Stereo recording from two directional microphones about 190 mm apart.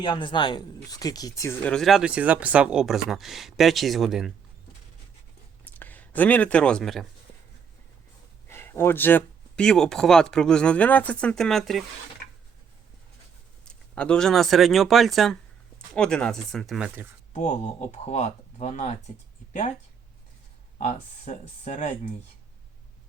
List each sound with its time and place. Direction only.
0.0 s speech: 25° left (ahead or behind)
1.7 s speech: centre (ahead or behind)
5.6 s speech: 10° left (ahead or behind)
8.4 s speech: 15° left (ahead or behind)
13.7 s speech: 5° left (ahead or behind)
17.3 s speech: 40° left (ahead or behind)
20.7 s speech: 40° left (ahead or behind)